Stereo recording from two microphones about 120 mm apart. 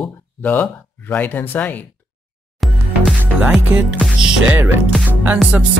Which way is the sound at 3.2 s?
15° right (ahead or behind).